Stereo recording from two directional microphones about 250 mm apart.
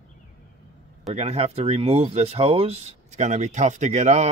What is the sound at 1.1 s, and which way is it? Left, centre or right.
Speech, right.